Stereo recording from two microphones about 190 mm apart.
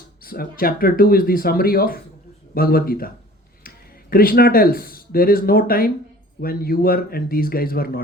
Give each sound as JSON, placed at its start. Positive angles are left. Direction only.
{"t": 0.2, "sound": "speech", "side_deg": 50}
{"t": 4.1, "sound": "speech", "side_deg": 50}